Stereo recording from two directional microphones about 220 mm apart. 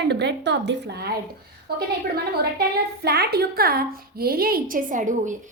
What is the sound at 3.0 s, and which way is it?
A woman's voice, 45° right (ahead or behind).